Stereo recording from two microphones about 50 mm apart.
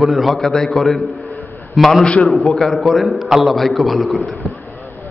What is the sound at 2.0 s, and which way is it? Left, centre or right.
A man's voice, centre.